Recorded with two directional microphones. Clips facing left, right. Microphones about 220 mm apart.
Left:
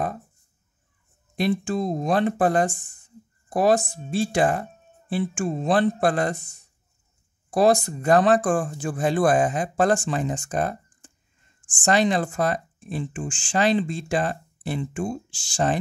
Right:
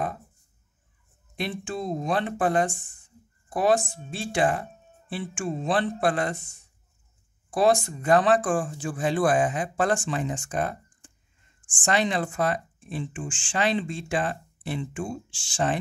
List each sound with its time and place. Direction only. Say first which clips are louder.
1.3 s speech: left 7 dB; 40° left (ahead or behind)